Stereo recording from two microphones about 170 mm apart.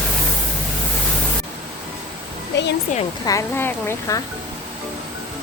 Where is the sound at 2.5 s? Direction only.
90° left.